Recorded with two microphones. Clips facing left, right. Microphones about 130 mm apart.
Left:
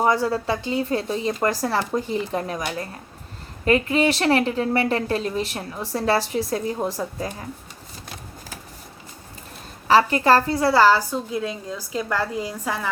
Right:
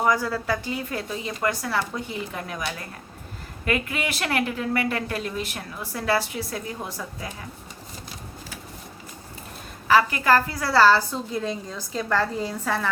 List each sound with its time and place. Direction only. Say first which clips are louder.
0.0 s speech: left 3 dB; 30° left (ahead or behind)
3.7 s speech: left 8 dB; 30° left (ahead or behind)
9.8 s speech: left 3 dB; 30° left (ahead or behind)
10.7 s a woman's voice: left 1 dB; 15° left (ahead or behind)